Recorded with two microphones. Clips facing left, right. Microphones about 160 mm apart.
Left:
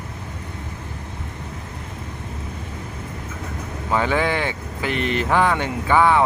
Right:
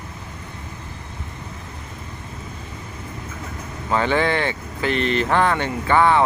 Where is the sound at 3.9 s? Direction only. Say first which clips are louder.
Right 1 dB; 5° left (ahead or behind).